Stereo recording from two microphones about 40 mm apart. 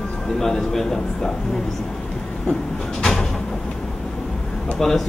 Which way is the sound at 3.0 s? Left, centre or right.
Centre.